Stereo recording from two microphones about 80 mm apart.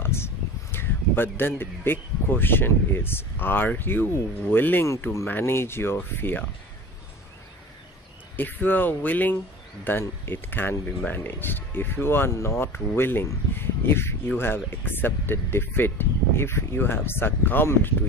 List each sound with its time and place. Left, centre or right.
0.0 s speech: left
4.8 s speech: left
8.4 s speech: left